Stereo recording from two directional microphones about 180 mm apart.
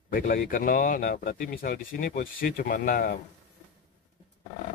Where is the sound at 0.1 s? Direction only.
50° left (ahead or behind).